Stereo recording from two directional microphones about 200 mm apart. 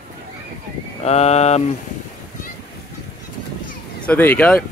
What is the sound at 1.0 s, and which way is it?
Mantra, 30° left (ahead or behind).